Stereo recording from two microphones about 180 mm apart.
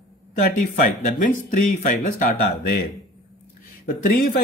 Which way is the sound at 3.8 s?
50° left (ahead or behind).